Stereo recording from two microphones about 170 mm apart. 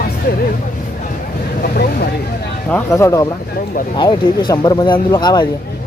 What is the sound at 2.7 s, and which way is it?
Speech, 15° left (ahead or behind).